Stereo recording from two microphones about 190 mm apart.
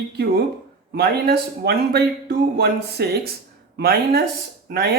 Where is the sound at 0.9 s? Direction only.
60° right (ahead or behind).